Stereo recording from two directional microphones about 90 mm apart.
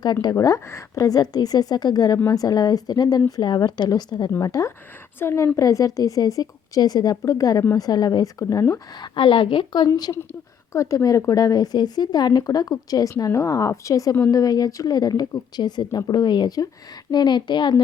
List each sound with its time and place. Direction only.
0.0 s speech: 50° left (ahead or behind)
0.3 s speech: 35° left (ahead or behind)
2.1 s speech: 40° left (ahead or behind)
4.3 s a woman's voice: 35° left (ahead or behind)
9.0 s a woman's voice: 70° left (ahead or behind)
9.9 s a woman's voice: 40° left (ahead or behind); by 17.7 s 55° left (ahead or behind)